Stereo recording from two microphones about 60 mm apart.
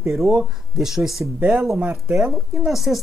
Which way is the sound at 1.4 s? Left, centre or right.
Centre.